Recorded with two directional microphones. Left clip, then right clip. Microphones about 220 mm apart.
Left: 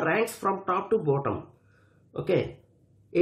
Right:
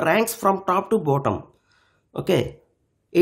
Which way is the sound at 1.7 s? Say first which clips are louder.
Right 4 dB; 50° right (ahead or behind).